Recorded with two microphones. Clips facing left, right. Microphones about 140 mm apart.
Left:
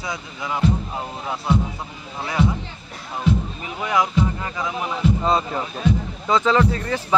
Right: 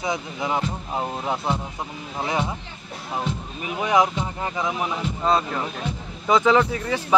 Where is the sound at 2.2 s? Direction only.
20° right (ahead or behind).